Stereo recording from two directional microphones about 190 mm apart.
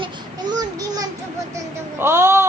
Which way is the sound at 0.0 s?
20° right (ahead or behind).